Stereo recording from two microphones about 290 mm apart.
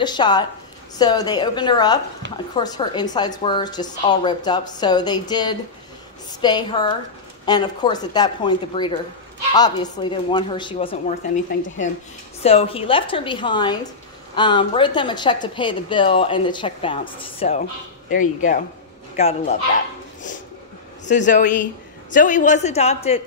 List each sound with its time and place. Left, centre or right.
0.0 s a woman's voice: centre
12.4 s a woman's voice: left
21.0 s a woman's voice: left